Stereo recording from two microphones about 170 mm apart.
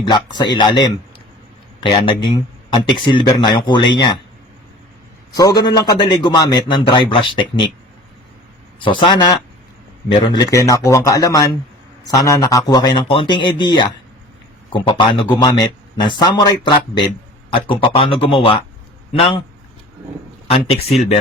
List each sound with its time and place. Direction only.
0.1 s a man's voice: 25° left (ahead or behind)
5.3 s a man's voice: 20° left (ahead or behind)
8.8 s a man's voice: 30° left (ahead or behind)
20.8 s speech: 40° left (ahead or behind)